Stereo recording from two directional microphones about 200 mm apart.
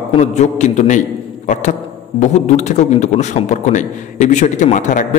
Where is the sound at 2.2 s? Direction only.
35° left (ahead or behind).